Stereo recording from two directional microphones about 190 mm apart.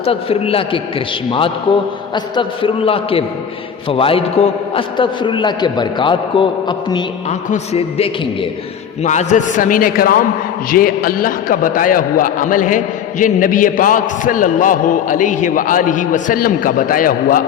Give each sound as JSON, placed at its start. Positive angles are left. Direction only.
{"t": 0.0, "sound": "a man's voice", "side_deg": 30}
{"t": 7.3, "sound": "a man's voice", "side_deg": 35}